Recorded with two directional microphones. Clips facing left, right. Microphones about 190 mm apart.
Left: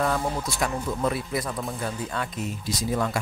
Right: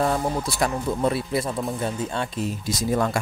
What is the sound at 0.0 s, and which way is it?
Speech, 30° right (ahead or behind).